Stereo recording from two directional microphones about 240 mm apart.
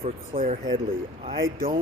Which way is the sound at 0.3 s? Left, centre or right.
Right.